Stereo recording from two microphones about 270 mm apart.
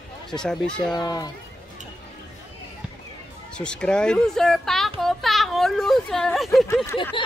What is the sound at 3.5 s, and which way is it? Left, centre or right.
Speech, centre.